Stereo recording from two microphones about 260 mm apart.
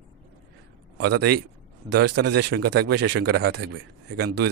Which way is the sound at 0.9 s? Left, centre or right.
Right.